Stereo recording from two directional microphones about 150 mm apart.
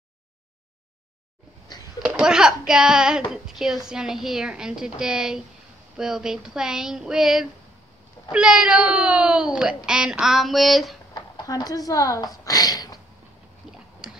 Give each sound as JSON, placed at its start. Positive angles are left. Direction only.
{"t": 2.0, "sound": "speech", "side_deg": -5}
{"t": 11.1, "sound": "speech", "side_deg": 25}
{"t": 14.0, "sound": "a sound", "side_deg": -5}